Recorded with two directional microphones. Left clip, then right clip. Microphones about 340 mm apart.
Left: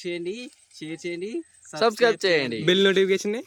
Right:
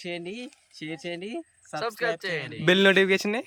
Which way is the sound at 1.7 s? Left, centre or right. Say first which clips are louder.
Left 8 dB; left.